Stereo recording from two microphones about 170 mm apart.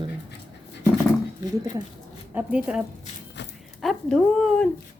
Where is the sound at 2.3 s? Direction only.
10° right (ahead or behind).